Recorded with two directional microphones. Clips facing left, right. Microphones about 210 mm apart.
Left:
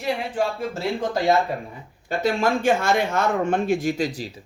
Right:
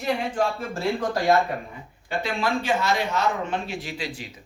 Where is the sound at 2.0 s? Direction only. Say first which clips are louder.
Left 5 dB; 45° left (ahead or behind).